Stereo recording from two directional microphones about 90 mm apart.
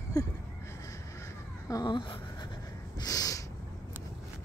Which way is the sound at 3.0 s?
40° left (ahead or behind).